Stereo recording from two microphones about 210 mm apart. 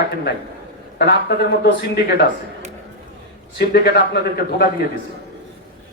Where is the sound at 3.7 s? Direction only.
50° left (ahead or behind).